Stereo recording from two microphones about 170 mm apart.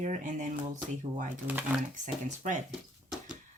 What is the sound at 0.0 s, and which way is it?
Speech, 50° right (ahead or behind).